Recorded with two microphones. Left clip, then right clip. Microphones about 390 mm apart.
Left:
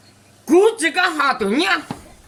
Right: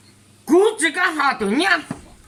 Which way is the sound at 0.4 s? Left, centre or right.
Centre.